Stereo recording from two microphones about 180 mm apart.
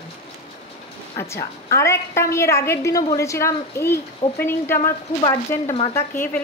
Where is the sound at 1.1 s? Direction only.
15° left (ahead or behind).